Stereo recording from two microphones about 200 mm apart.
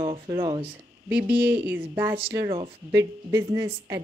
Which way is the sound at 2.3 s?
25° right (ahead or behind).